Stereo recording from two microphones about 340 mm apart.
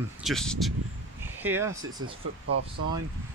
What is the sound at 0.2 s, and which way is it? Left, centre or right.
Speech, centre.